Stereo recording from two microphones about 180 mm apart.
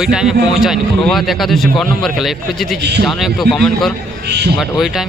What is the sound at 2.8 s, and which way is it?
Speech, 65° right (ahead or behind).